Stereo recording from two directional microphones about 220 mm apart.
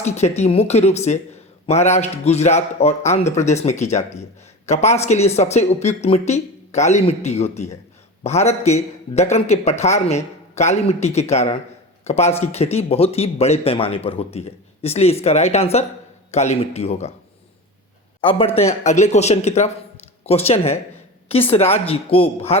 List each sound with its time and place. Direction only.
0.0 s a man's voice: 30° left (ahead or behind)
18.2 s a man's voice: 25° left (ahead or behind)